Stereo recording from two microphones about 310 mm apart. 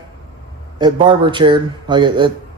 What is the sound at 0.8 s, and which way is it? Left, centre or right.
Speech, centre.